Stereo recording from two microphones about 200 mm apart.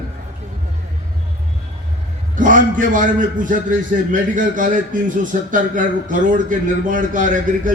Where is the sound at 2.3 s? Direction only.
40° right (ahead or behind).